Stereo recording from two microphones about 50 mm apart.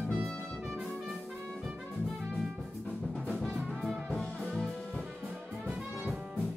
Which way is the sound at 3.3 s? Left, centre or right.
Centre.